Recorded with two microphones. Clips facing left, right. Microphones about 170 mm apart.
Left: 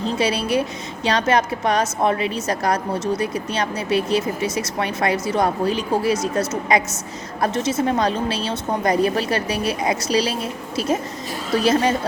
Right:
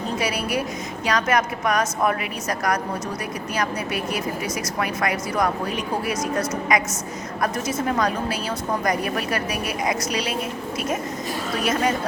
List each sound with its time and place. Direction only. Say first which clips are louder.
0.0 s a woman's voice: left 4 dB; 25° left (ahead or behind)